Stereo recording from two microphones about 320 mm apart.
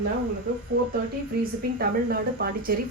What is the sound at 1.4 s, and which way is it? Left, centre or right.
Speech, right.